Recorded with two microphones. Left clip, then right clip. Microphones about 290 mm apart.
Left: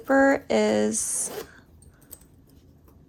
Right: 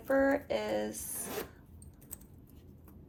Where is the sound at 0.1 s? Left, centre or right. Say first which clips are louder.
Left 9 dB; left.